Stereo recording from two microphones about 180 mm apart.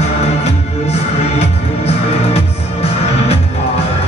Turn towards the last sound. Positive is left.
turn(degrees=35)  # may be behind; listen again after turning